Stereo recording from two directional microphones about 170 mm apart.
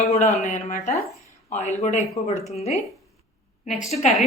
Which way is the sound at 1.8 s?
45° left (ahead or behind).